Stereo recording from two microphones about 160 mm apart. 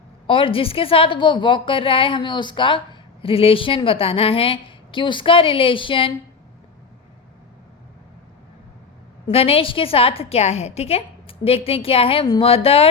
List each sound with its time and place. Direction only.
0.3 s a woman's voice: 35° left (ahead or behind)
9.2 s a woman's voice: 35° left (ahead or behind)